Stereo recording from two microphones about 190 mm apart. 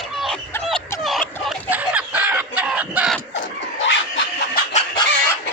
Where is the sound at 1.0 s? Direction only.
Centre (ahead or behind).